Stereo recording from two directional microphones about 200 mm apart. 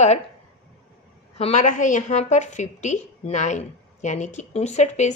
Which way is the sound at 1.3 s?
35° left (ahead or behind).